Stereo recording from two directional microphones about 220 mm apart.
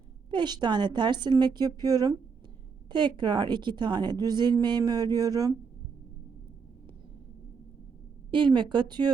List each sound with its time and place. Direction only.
0.3 s a woman's voice: 20° right (ahead or behind)
8.3 s a woman's voice: 20° right (ahead or behind)